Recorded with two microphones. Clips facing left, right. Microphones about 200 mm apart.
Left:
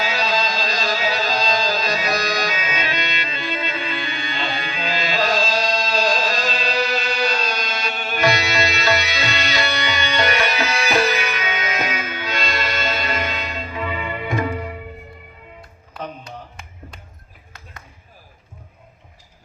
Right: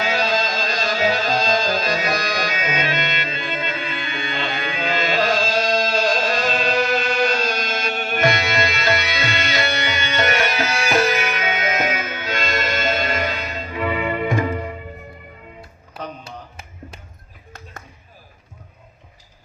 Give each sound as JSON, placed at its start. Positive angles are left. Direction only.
{"t": 0.0, "sound": "music", "side_deg": -50}